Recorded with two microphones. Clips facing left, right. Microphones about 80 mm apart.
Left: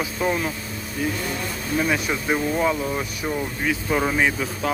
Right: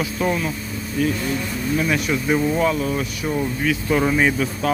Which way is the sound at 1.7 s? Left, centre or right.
Centre.